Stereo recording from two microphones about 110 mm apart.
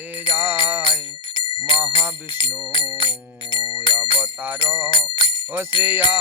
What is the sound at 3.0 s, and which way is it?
Music, 50° left (ahead or behind).